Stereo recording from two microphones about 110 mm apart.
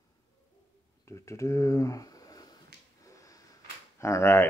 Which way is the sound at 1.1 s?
25° left (ahead or behind).